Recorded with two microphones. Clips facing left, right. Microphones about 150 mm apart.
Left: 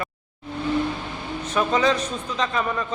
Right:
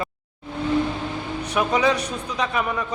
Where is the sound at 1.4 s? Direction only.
10° right (ahead or behind).